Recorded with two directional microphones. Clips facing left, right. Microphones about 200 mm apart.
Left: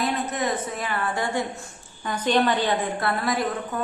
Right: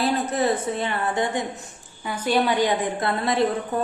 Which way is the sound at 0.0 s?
30° right (ahead or behind).